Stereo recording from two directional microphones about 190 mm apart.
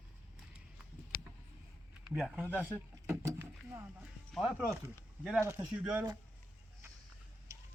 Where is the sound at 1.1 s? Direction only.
50° left (ahead or behind).